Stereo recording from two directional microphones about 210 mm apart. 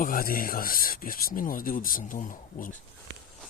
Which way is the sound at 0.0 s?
40° left (ahead or behind).